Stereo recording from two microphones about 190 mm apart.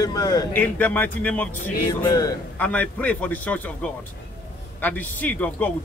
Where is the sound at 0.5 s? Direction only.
10° left (ahead or behind).